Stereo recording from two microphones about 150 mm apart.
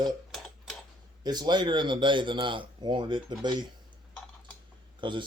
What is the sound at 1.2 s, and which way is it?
A man's voice, 30° right (ahead or behind).